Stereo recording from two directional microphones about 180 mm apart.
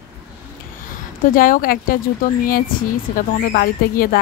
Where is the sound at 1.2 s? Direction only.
50° left (ahead or behind).